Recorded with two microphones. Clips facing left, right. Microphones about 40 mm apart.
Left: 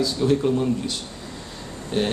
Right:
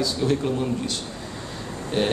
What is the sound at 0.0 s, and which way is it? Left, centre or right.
A man's voice, centre.